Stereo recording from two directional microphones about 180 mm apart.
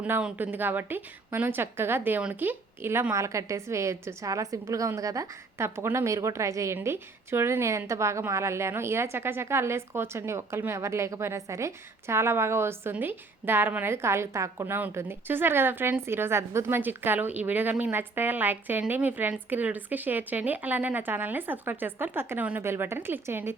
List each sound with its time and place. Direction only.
0.0 s speech: 5° right (ahead or behind)